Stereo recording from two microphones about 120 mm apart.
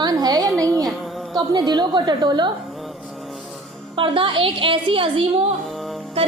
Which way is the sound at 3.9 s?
45° right (ahead or behind).